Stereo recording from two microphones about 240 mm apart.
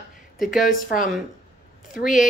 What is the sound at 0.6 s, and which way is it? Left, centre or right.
Speech, left.